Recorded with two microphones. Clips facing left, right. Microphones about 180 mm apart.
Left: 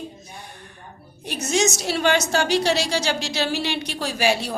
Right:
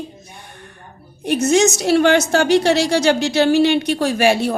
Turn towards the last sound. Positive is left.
turn(degrees=-55)  # may be behind; listen again after turning